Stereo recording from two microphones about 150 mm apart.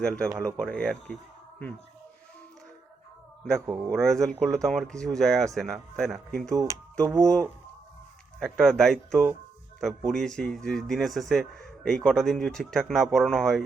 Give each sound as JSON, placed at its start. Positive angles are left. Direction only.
{"t": 0.0, "sound": "speech", "side_deg": 5}
{"t": 0.3, "sound": "speech", "side_deg": -20}
{"t": 0.6, "sound": "speech", "side_deg": 5}
{"t": 3.9, "sound": "speech", "side_deg": 5}
{"t": 6.5, "sound": "speech", "side_deg": -20}
{"t": 8.4, "sound": "speech", "side_deg": 0}